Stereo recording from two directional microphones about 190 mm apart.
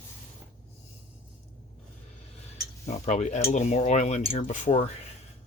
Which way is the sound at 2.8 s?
35° left (ahead or behind).